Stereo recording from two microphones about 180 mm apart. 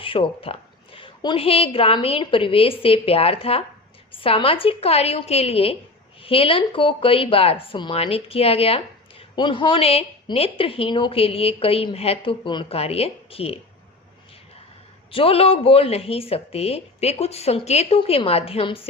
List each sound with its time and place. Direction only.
0.0 s speech: 30° left (ahead or behind)
15.1 s speech: 30° left (ahead or behind)